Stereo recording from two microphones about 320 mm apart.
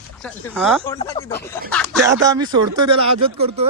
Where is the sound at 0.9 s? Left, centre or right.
Centre.